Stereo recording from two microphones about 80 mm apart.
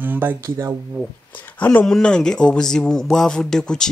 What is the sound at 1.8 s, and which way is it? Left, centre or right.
Speech, centre.